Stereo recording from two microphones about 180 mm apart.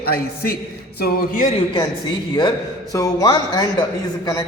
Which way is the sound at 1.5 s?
30° left (ahead or behind).